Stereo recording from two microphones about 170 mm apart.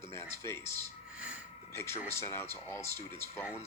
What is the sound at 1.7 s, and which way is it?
Speech, 15° left (ahead or behind).